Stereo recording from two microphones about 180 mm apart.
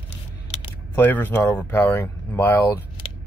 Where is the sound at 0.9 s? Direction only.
10° left (ahead or behind).